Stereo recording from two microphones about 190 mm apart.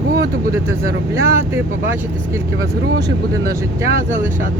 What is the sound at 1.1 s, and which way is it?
Speech, 15° right (ahead or behind).